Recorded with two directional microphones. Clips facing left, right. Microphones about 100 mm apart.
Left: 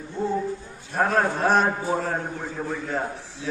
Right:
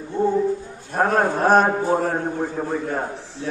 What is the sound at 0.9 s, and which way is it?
A man's voice, 50° right (ahead or behind).